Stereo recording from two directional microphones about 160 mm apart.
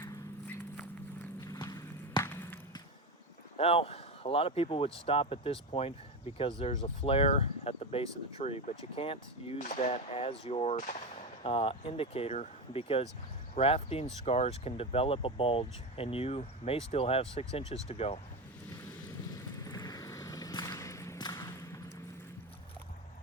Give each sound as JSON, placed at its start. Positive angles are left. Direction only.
{"t": 0.0, "sound": "a sound", "side_deg": 10}
{"t": 1.5, "sound": "walk", "side_deg": 25}
{"t": 3.6, "sound": "speech", "side_deg": 40}
{"t": 9.6, "sound": "speech", "side_deg": 50}
{"t": 10.8, "sound": "speech", "side_deg": 55}
{"t": 11.4, "sound": "speech", "side_deg": 35}
{"t": 19.3, "sound": "vehicle", "side_deg": 25}